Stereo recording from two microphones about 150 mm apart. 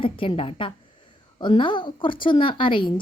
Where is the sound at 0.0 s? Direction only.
35° left (ahead or behind).